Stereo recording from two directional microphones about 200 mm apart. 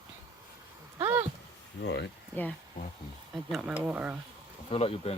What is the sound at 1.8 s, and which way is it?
Speech, 60° left (ahead or behind).